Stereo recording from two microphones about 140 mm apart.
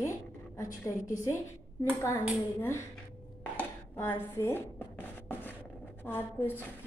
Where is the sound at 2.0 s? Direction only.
20° left (ahead or behind).